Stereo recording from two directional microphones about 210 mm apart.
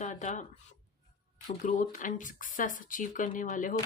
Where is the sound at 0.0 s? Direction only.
35° left (ahead or behind).